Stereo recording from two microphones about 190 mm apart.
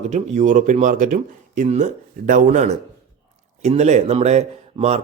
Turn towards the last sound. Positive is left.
turn(degrees=-35)  # may be behind; listen again after turning